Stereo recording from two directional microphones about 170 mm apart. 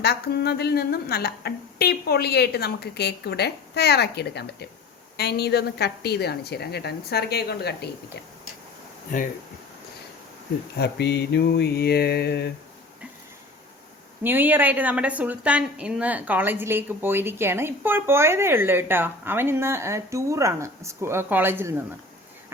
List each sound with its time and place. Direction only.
0.0 s a woman's voice: 70° left (ahead or behind)
9.1 s speech: 50° left (ahead or behind)
10.8 s a woman's voice: 75° left (ahead or behind)
14.3 s a woman's voice: 10° right (ahead or behind)